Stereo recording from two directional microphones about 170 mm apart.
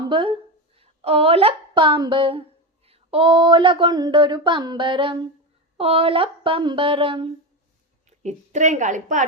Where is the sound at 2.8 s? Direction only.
35° right (ahead or behind).